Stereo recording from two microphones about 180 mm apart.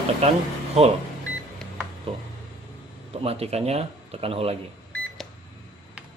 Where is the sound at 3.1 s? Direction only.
35° right (ahead or behind).